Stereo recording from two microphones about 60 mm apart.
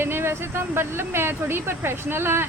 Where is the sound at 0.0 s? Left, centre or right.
Right.